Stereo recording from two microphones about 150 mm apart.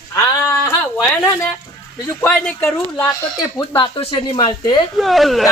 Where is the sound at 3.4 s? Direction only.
30° left (ahead or behind).